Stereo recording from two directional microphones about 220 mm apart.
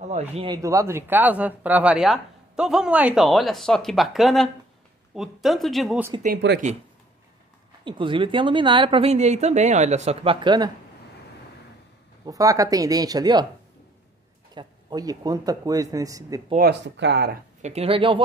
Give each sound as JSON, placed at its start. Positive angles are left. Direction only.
{"t": 0.1, "sound": "a woman's voice", "side_deg": -25}
{"t": 0.6, "sound": "speech", "side_deg": -15}
{"t": 6.2, "sound": "speech", "side_deg": -45}
{"t": 7.8, "sound": "a woman's voice", "side_deg": -20}
{"t": 12.3, "sound": "speech", "side_deg": -15}
{"t": 14.5, "sound": "speech", "side_deg": -20}
{"t": 16.5, "sound": "speech", "side_deg": -50}
{"t": 17.6, "sound": "a woman's voice", "side_deg": -30}